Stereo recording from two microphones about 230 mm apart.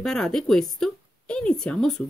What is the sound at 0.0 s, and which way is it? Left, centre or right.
A woman's voice, centre.